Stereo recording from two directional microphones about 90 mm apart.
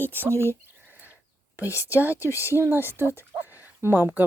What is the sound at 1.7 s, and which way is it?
Speech, 35° left (ahead or behind).